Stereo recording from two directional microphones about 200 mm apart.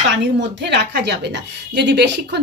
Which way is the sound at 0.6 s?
55° right (ahead or behind).